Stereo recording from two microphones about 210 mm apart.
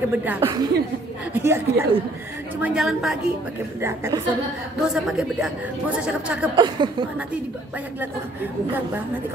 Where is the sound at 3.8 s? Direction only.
15° right (ahead or behind).